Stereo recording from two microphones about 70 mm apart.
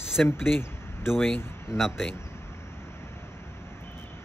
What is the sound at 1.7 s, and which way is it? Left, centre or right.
Speech, centre.